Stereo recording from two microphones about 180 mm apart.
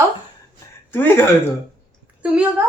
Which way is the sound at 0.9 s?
10° left (ahead or behind).